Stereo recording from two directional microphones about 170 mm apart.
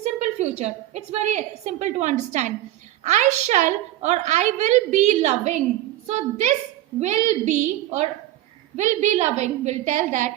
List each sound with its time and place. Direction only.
0.0 s a woman's voice: 40° right (ahead or behind)